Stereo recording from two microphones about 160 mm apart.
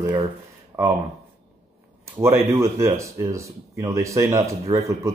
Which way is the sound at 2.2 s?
15° right (ahead or behind).